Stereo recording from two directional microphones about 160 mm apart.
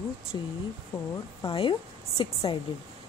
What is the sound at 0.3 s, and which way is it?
Speech, 25° left (ahead or behind).